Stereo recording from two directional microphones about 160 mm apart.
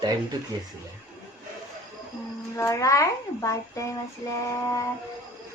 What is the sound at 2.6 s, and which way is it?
A child's voice, 20° left (ahead or behind).